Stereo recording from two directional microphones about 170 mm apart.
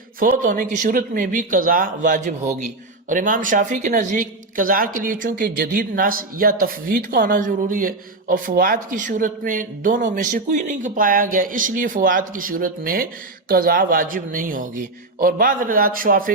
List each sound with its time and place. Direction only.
0.2 s speech: 55° right (ahead or behind)